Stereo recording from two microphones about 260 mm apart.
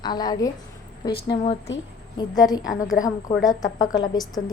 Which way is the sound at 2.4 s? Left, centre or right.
Centre.